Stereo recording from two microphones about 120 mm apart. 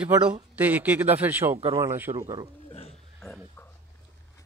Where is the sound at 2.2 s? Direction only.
35° right (ahead or behind).